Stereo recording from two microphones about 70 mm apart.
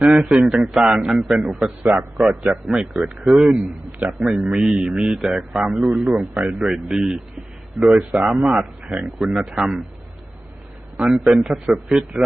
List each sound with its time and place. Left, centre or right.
0.0 s a man's voice: centre
7.8 s speech: centre
8.1 s a man's voice: centre
10.9 s a man's voice: centre